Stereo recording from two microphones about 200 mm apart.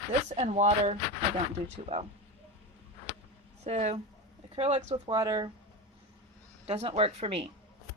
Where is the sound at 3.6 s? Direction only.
35° right (ahead or behind).